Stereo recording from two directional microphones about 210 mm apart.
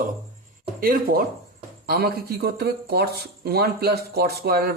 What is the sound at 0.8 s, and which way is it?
Speech, 45° right (ahead or behind).